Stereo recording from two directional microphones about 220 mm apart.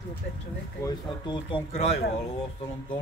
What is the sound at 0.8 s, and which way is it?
Speech, 20° left (ahead or behind).